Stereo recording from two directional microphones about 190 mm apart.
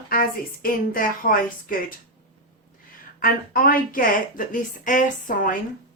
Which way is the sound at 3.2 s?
50° left (ahead or behind).